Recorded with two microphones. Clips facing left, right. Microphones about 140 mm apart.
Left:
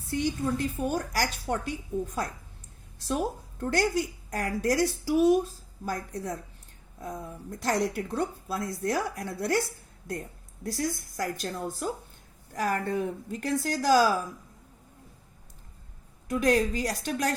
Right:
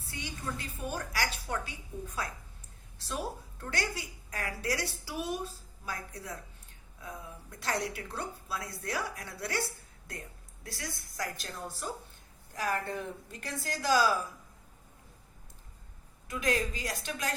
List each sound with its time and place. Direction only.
0.1 s a woman's voice: 45° left (ahead or behind)
3.1 s a woman's voice: 45° left (ahead or behind)
16.3 s a woman's voice: 45° left (ahead or behind)